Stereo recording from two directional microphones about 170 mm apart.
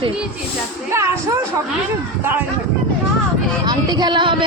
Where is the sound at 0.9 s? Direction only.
15° right (ahead or behind).